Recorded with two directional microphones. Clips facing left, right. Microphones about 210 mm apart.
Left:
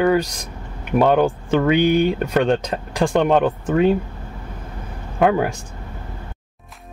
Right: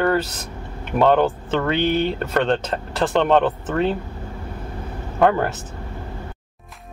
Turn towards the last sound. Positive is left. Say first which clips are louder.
# left 1 dB
turn(degrees=10)  # may be behind; listen again after turning